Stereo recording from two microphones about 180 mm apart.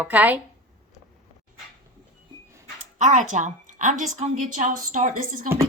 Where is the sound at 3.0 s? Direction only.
40° right (ahead or behind).